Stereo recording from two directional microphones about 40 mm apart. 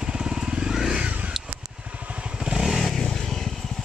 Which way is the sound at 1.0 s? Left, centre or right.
Right.